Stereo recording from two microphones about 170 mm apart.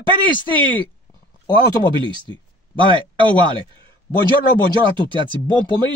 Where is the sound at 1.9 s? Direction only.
30° right (ahead or behind).